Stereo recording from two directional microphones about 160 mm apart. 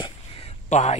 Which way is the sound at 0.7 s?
45° left (ahead or behind).